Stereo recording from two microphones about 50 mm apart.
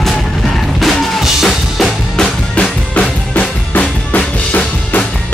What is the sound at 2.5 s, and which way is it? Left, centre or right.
Drum, left.